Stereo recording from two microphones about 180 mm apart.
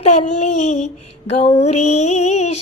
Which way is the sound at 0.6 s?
40° left (ahead or behind).